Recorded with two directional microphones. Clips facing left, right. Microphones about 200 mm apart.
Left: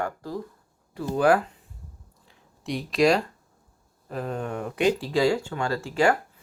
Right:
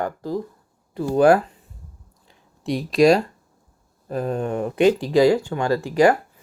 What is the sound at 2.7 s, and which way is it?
Speech, 40° right (ahead or behind).